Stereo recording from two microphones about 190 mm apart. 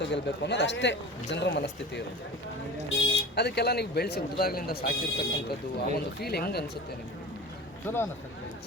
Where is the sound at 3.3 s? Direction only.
60° left (ahead or behind).